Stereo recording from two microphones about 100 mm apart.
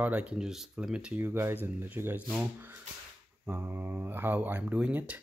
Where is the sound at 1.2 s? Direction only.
25° right (ahead or behind).